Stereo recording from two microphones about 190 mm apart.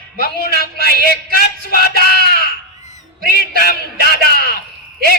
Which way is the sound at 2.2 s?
50° right (ahead or behind).